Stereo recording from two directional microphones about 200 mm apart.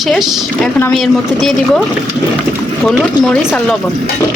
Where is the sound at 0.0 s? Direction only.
Centre (ahead or behind).